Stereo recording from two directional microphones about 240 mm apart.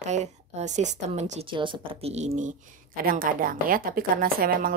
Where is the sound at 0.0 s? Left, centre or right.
Right.